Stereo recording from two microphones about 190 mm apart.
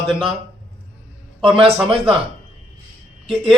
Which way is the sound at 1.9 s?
30° right (ahead or behind).